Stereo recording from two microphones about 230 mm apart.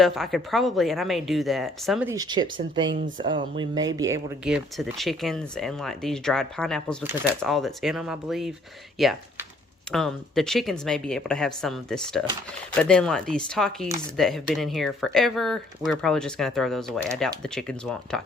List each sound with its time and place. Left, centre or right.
0.0 s speech: centre
2.0 s speech: centre
4.4 s speech: centre
7.0 s speech: centre